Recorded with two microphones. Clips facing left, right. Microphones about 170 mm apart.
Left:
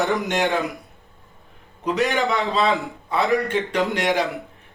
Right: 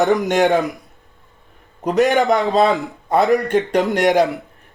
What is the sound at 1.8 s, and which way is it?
A man's voice, 45° right (ahead or behind).